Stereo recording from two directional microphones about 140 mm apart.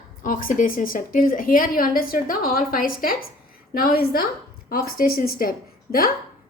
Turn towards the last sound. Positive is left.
turn(degrees=90)